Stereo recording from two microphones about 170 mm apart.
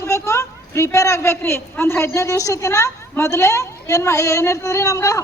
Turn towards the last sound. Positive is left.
turn(degrees=20)  # may be behind; listen again after turning